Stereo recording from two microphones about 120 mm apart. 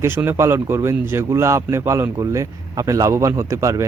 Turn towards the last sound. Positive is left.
turn(degrees=-25)  # may be behind; listen again after turning